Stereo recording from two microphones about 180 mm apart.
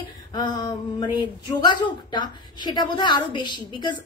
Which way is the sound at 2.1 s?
25° left (ahead or behind).